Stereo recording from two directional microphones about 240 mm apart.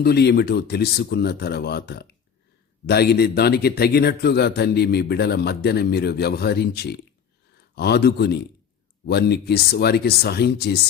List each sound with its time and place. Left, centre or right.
0.0 s a man's voice: left